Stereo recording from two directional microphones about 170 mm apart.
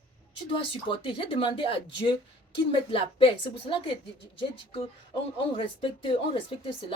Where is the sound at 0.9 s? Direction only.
30° left (ahead or behind).